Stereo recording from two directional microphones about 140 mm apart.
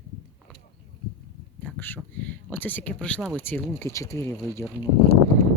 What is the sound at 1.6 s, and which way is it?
Speech, 10° left (ahead or behind).